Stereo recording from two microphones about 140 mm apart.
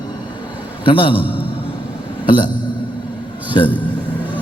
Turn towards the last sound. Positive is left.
turn(degrees=35)  # may be behind; listen again after turning